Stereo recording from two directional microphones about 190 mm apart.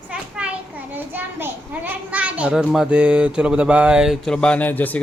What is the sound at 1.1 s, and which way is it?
A child's voice, 10° right (ahead or behind).